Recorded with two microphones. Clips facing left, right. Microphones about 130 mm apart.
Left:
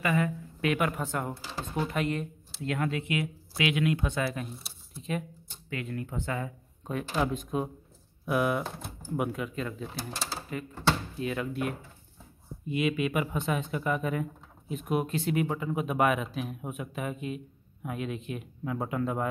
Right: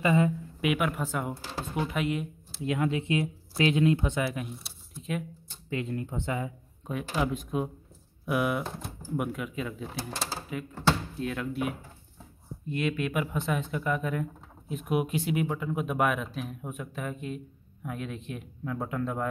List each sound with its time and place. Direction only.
0.0 s speech: 25° right (ahead or behind)
0.6 s speech: 10° right (ahead or behind)
2.6 s speech: 15° right (ahead or behind)
3.0 s speech: 30° right (ahead or behind)
4.2 s speech: 10° right (ahead or behind)
5.7 s speech: 25° right (ahead or behind)
6.9 s speech: 5° right (ahead or behind)